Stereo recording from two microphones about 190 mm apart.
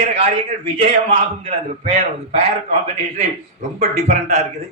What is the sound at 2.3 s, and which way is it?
Speech, 35° right (ahead or behind).